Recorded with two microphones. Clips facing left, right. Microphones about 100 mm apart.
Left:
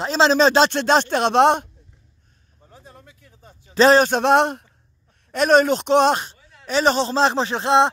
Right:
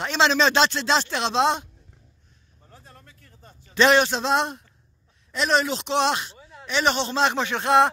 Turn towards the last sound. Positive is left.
turn(degrees=25)  # may be behind; listen again after turning